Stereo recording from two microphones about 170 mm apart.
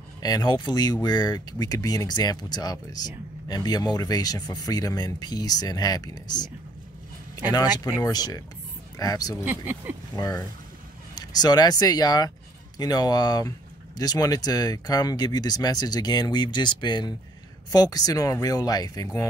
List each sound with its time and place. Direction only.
0.2 s speech: 25° left (ahead or behind)
7.5 s speech: 25° left (ahead or behind)
9.4 s speech: 10° right (ahead or behind)
10.1 s speech: 20° left (ahead or behind)